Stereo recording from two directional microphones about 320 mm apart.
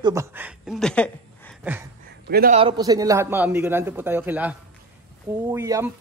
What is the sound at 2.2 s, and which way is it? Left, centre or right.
A man's voice, right.